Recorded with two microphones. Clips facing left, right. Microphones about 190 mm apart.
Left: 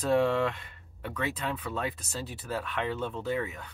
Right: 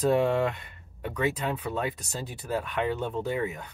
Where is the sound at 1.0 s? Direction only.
15° right (ahead or behind).